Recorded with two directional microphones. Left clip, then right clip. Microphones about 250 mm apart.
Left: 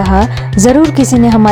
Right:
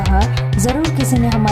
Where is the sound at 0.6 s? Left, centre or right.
Left.